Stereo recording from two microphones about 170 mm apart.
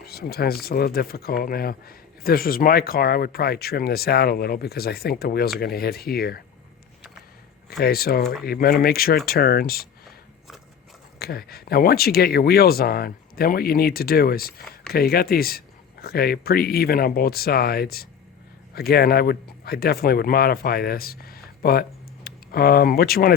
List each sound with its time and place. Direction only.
0.0 s speech: 65° left (ahead or behind)
7.7 s speech: 65° left (ahead or behind)
11.2 s speech: 65° left (ahead or behind)